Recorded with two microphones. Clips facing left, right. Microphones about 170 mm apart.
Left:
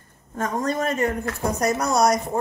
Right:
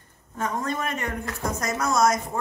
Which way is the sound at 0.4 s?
40° left (ahead or behind).